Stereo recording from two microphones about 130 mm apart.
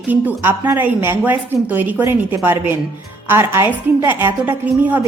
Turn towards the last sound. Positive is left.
turn(degrees=-10)  # may be behind; listen again after turning